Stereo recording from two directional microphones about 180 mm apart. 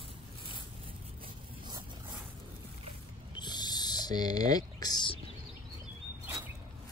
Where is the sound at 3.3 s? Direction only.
25° left (ahead or behind).